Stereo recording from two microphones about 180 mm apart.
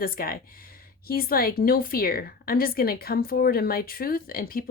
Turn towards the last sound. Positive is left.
turn(degrees=55)  # may be behind; listen again after turning